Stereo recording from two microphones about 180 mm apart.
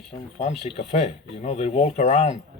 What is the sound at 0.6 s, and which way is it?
A man's voice, 40° left (ahead or behind).